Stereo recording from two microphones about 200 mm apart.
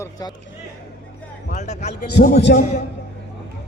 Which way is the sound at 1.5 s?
35° left (ahead or behind).